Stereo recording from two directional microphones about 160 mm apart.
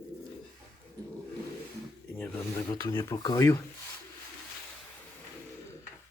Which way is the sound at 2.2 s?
10° left (ahead or behind).